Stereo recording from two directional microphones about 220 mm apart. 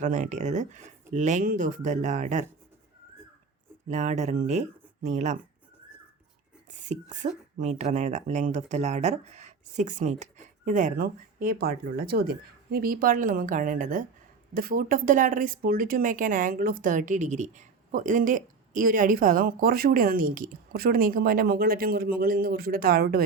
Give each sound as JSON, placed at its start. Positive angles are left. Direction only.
{"t": 0.0, "sound": "speech", "side_deg": -35}
{"t": 3.8, "sound": "speech", "side_deg": -30}
{"t": 6.8, "sound": "speech", "side_deg": -35}